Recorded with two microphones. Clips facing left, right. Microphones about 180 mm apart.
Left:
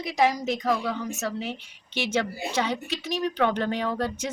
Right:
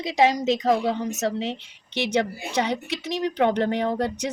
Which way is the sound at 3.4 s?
20° right (ahead or behind).